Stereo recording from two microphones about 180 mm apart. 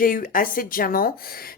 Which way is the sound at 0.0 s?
50° left (ahead or behind).